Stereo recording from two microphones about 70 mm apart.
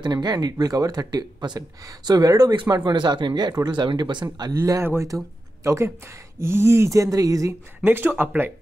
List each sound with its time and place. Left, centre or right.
0.0 s speech: right
2.0 s speech: right
5.0 s speech: right
7.8 s speech: right